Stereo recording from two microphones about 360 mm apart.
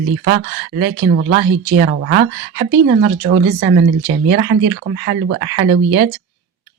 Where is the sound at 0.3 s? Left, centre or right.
Right.